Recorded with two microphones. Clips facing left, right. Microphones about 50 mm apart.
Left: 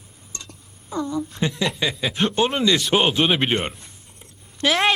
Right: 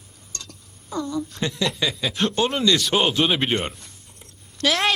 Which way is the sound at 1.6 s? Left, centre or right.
Centre.